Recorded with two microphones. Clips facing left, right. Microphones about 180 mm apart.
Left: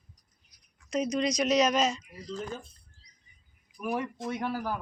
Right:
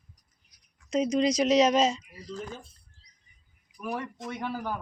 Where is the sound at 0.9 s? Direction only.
25° right (ahead or behind).